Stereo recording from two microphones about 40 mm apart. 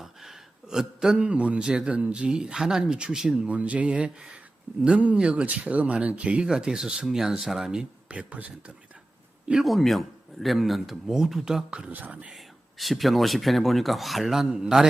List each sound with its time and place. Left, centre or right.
0.0 s a sound: centre
1.1 s speech: right
4.7 s speech: right
5.1 s speech: right
6.5 s speech: centre
8.0 s speech: right
9.6 s speech: centre
11.9 s speech: right
12.8 s speech: centre